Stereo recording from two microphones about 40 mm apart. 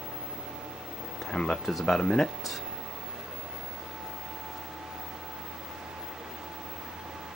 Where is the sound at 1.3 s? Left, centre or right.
Centre.